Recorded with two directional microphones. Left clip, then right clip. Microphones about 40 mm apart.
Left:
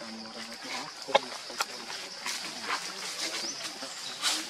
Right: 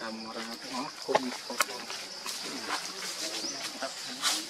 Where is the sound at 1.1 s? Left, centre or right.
Centre.